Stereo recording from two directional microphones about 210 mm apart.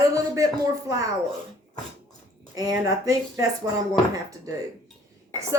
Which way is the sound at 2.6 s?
15° right (ahead or behind).